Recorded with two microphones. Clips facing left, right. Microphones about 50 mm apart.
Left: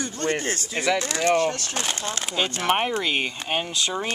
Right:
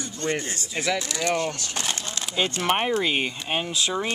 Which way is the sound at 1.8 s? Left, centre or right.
Left.